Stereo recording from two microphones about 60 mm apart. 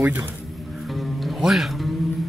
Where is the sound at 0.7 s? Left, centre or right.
Centre.